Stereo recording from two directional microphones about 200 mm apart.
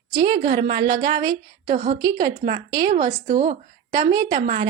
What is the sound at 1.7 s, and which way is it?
Speech, 45° right (ahead or behind).